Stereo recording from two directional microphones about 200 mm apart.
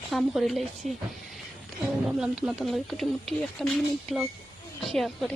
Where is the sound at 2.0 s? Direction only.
Centre (ahead or behind).